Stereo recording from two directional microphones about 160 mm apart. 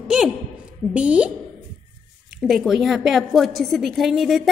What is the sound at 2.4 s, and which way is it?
A woman's voice, centre (ahead or behind).